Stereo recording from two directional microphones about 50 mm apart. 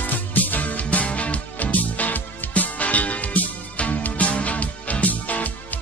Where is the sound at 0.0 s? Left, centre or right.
Left.